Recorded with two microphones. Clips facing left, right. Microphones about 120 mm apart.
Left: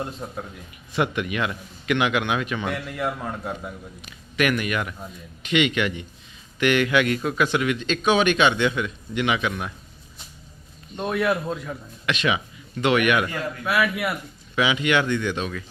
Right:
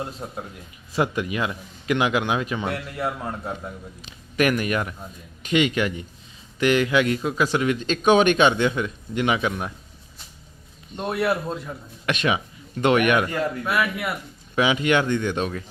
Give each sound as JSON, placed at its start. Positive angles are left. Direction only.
{"t": 0.2, "sound": "a man's voice", "side_deg": -10}
{"t": 0.9, "sound": "a man's voice", "side_deg": -30}
{"t": 2.6, "sound": "a man's voice", "side_deg": -5}
{"t": 4.4, "sound": "a man's voice", "side_deg": -35}
{"t": 10.9, "sound": "a man's voice", "side_deg": -5}
{"t": 12.0, "sound": "speech", "side_deg": -45}
{"t": 13.7, "sound": "a man's voice", "side_deg": 0}
{"t": 14.5, "sound": "speech", "side_deg": -40}